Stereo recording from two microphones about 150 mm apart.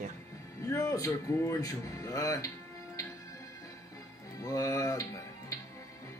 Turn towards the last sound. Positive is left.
turn(degrees=20)  # may be behind; listen again after turning